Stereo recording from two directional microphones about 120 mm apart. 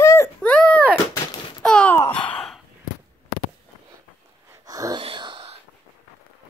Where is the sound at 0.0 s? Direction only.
25° left (ahead or behind).